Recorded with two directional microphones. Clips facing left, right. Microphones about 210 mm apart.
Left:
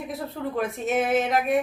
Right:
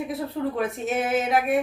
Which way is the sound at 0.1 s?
Centre (ahead or behind).